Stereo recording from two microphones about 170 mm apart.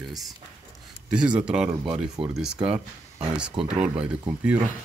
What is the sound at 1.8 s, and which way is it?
Speech, 30° right (ahead or behind).